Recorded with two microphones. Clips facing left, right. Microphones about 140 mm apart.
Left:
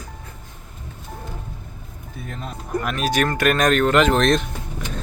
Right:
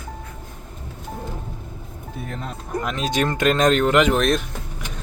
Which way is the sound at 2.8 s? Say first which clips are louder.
Left 1 dB; 20° right (ahead or behind).